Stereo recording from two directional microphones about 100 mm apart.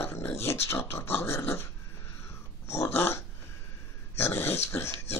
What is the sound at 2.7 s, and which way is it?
Dog, 25° left (ahead or behind).